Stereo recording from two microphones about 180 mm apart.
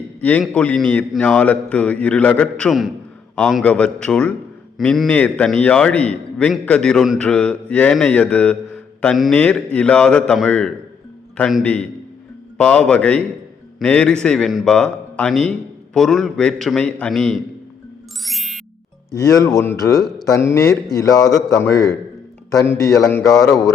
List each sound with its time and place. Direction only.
0.2 s a man's voice: 5° left (ahead or behind)
18.2 s music: centre (ahead or behind)
19.1 s a man's voice: 20° left (ahead or behind)